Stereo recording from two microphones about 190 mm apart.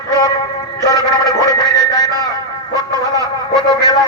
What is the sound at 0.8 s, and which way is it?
Music, 20° left (ahead or behind).